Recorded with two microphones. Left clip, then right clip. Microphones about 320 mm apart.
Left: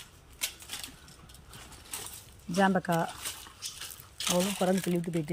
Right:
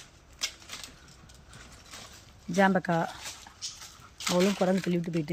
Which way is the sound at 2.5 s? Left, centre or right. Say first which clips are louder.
Right 2 dB; centre.